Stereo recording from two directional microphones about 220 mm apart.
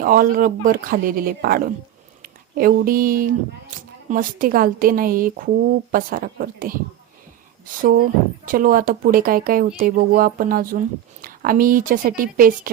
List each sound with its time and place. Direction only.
0.0 s speech: 40° right (ahead or behind)
7.8 s speech: 40° right (ahead or behind)